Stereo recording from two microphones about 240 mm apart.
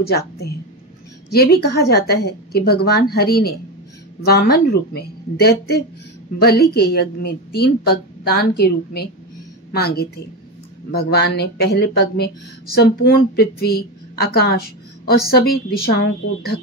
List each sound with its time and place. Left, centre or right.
0.0 s speech: left